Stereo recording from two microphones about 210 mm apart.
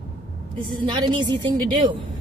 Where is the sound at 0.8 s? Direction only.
20° right (ahead or behind).